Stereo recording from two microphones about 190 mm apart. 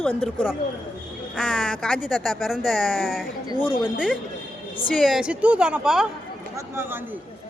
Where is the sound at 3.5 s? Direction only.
25° left (ahead or behind).